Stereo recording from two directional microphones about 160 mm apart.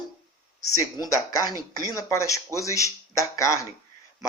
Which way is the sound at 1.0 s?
25° left (ahead or behind).